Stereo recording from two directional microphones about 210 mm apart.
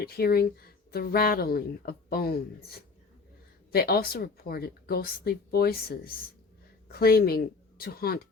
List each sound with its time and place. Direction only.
0.0 s speech: 45° left (ahead or behind)